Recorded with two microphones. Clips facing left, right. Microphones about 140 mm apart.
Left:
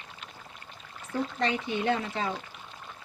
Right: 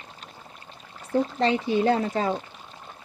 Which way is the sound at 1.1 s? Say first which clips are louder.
Right 6 dB; 30° right (ahead or behind).